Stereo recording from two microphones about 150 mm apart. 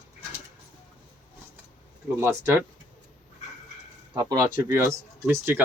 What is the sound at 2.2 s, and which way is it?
Speech, 15° right (ahead or behind).